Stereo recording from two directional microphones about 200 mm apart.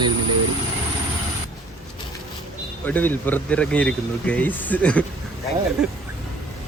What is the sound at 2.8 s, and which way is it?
Speech, 10° left (ahead or behind).